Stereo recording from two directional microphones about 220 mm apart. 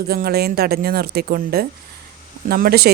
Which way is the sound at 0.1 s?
45° right (ahead or behind).